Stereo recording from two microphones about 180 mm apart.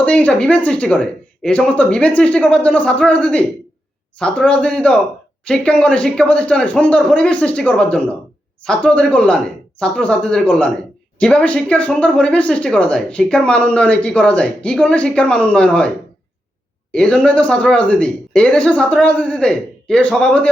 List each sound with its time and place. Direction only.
0.0 s speech: 5° left (ahead or behind)
16.9 s speech: 5° left (ahead or behind)